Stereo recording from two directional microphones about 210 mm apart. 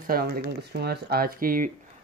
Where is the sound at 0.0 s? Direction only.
45° right (ahead or behind).